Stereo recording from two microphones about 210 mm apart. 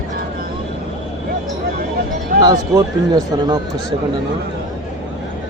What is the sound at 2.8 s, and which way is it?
Speech, 20° right (ahead or behind).